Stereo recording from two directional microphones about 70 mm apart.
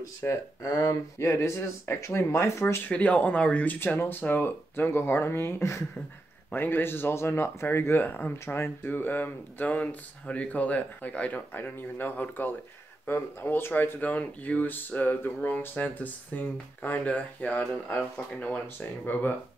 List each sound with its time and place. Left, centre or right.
0.3 s speech: left
2.9 s speech: centre; by 5.9 s left
6.5 s speech: left